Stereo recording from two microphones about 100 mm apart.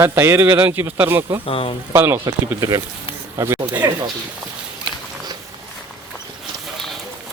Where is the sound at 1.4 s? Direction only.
65° left (ahead or behind).